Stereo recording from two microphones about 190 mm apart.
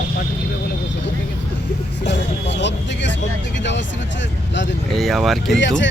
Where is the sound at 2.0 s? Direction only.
65° left (ahead or behind).